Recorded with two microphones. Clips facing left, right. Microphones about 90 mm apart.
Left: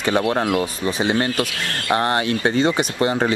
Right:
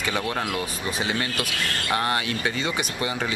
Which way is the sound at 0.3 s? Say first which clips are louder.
Left 8 dB; 30° left (ahead or behind).